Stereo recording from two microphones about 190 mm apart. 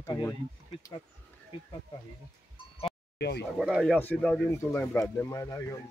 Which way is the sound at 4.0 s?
10° left (ahead or behind).